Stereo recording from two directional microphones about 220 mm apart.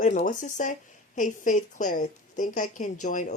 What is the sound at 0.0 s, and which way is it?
A woman's voice, 35° left (ahead or behind).